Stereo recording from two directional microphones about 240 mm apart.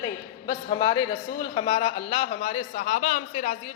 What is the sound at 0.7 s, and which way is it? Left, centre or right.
A man's voice, centre.